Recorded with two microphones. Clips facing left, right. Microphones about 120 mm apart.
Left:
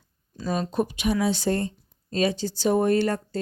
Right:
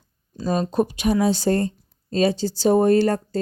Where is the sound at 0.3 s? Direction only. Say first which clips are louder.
Right 4 dB; 35° right (ahead or behind).